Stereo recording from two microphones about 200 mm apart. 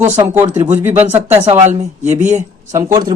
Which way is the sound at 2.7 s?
15° right (ahead or behind).